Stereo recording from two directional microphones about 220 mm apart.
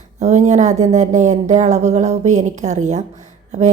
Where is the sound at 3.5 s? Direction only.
30° right (ahead or behind).